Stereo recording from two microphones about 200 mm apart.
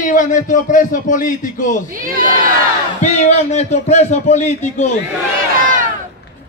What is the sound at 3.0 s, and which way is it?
A man's voice, 35° left (ahead or behind).